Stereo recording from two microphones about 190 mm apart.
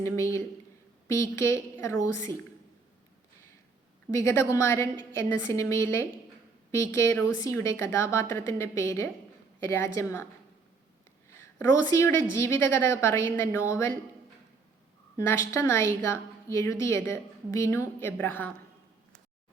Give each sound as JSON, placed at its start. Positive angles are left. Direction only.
{"t": 0.0, "sound": "a woman's voice", "side_deg": 15}
{"t": 4.3, "sound": "a woman's voice", "side_deg": 15}
{"t": 11.3, "sound": "a woman's voice", "side_deg": 15}
{"t": 15.3, "sound": "a woman's voice", "side_deg": 15}